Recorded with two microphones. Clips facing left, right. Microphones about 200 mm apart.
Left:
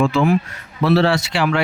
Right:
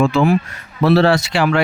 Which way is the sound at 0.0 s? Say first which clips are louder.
Right 2 dB; 40° right (ahead or behind).